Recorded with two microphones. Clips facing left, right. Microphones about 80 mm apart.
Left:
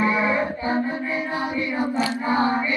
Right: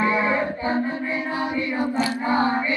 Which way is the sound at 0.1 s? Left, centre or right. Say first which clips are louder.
Even; right.